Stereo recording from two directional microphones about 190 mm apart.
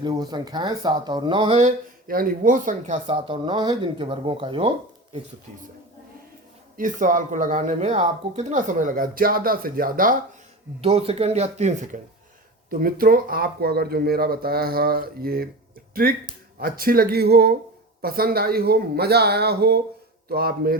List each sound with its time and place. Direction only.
0.0 s speech: 20° right (ahead or behind)
1.5 s speech: 45° right (ahead or behind)
3.1 s speech: 25° right (ahead or behind)
6.7 s speech: 45° right (ahead or behind)
10.8 s speech: 30° right (ahead or behind)
12.8 s speech: 50° right (ahead or behind)